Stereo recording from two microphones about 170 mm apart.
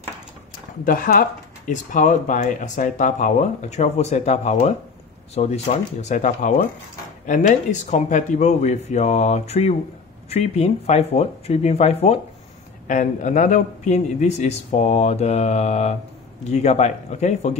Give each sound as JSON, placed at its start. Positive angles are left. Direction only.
{"t": 0.8, "sound": "a man's voice", "side_deg": 55}